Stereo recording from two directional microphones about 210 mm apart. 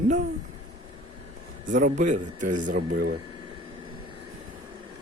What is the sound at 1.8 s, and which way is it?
A man's voice, 40° right (ahead or behind).